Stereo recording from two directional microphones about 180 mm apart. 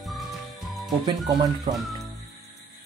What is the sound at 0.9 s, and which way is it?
Speech, 25° right (ahead or behind).